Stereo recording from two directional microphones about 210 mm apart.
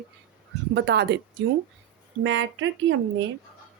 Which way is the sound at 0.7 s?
55° right (ahead or behind).